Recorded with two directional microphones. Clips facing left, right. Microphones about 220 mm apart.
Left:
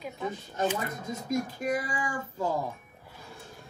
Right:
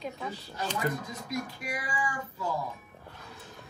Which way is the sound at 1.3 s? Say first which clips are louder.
Left 7 dB; 45° left (ahead or behind).